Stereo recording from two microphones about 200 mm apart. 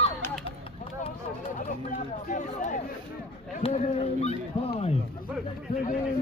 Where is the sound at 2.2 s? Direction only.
40° left (ahead or behind).